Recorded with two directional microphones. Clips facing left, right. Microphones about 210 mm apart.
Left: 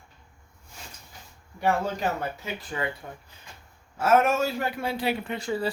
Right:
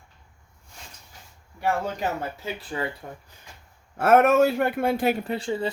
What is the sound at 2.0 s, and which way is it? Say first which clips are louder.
Speech: even; 30° right (ahead or behind).